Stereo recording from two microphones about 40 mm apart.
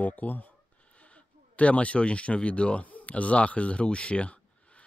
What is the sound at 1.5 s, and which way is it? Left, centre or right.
Speech, left.